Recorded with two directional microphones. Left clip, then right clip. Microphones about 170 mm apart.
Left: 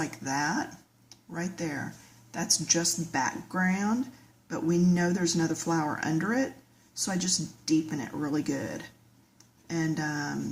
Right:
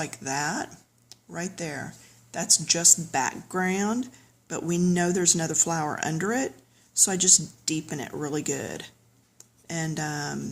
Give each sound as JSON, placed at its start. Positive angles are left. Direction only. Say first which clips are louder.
{"t": 0.0, "sound": "speech", "louder": "right 1 dB", "side_deg": -50}